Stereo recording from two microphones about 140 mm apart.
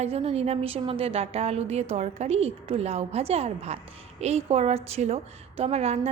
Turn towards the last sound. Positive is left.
turn(degrees=-50)  # may be behind; listen again after turning